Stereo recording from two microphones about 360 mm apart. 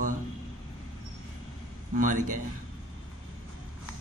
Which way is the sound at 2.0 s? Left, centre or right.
Right.